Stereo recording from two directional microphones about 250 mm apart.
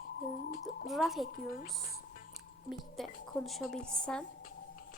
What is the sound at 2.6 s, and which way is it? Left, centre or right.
A woman's voice, centre.